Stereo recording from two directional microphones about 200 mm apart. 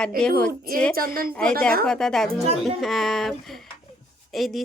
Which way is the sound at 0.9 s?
45° right (ahead or behind).